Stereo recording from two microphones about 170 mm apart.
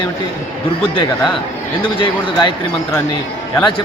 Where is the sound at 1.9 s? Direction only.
30° left (ahead or behind).